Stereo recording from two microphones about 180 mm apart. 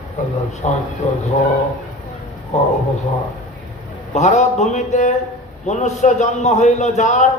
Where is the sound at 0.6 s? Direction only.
40° left (ahead or behind).